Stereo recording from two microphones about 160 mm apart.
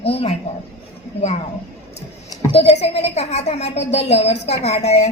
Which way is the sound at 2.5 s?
40° left (ahead or behind).